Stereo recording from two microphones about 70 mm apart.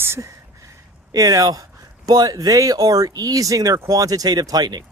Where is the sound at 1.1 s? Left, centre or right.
Right.